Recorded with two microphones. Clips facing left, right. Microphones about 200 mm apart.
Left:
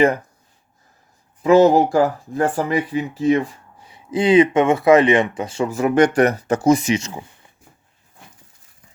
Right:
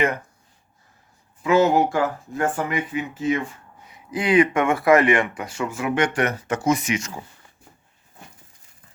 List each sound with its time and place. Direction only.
1.4 s speech: 35° left (ahead or behind); by 7.5 s 20° left (ahead or behind)